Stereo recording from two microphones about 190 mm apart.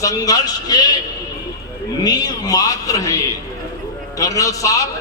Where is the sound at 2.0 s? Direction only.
20° left (ahead or behind).